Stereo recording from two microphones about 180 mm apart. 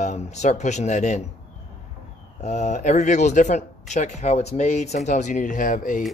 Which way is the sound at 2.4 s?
40° left (ahead or behind).